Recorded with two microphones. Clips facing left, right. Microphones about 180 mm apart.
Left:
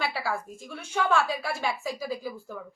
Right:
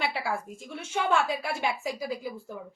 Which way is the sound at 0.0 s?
20° right (ahead or behind).